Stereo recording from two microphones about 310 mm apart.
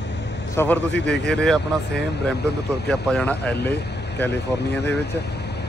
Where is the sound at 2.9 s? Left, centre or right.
Centre.